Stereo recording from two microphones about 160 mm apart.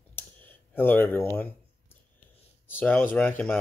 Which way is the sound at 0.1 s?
10° left (ahead or behind).